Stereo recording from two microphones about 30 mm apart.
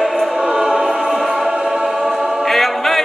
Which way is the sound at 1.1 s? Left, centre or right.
Centre.